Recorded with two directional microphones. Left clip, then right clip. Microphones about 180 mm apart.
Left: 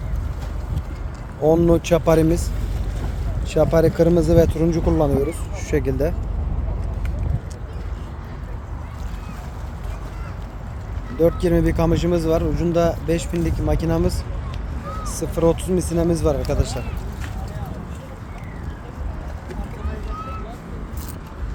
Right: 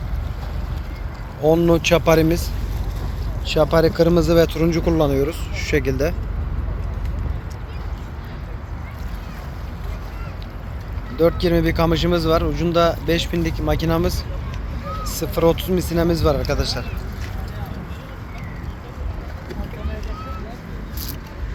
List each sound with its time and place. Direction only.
1.5 s speech: 15° left (ahead or behind)
3.5 s speech: 15° left (ahead or behind)
11.2 s speech: 20° left (ahead or behind)
15.2 s speech: 5° left (ahead or behind)